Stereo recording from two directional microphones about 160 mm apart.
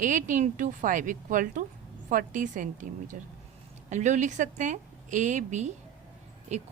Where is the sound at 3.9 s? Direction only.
45° right (ahead or behind).